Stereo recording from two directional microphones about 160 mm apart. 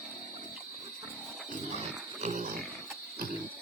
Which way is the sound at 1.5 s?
50° right (ahead or behind).